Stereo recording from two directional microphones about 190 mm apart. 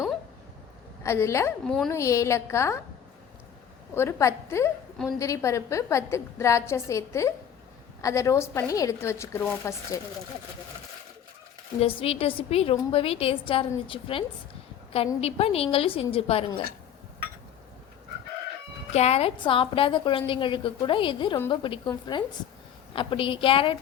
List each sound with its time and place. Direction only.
1.0 s a woman's voice: 15° left (ahead or behind)
1.6 s speech: centre (ahead or behind)
1.9 s a woman's voice: 15° left (ahead or behind)
3.9 s a woman's voice: 15° left (ahead or behind)
11.8 s a woman's voice: 30° left (ahead or behind)
18.9 s a woman's voice: 35° left (ahead or behind)